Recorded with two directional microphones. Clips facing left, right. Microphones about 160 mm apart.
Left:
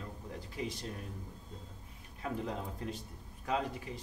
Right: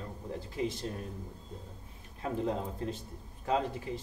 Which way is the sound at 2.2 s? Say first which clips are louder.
Right 5 dB; 30° right (ahead or behind).